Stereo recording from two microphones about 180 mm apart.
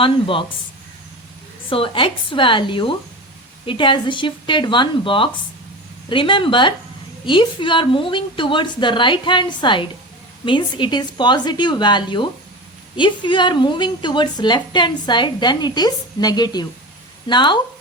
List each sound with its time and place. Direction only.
0.0 s a woman's voice: 30° left (ahead or behind)
1.7 s a woman's voice: 30° left (ahead or behind)